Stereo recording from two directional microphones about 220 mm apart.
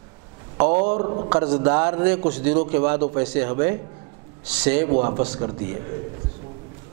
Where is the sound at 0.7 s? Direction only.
35° right (ahead or behind).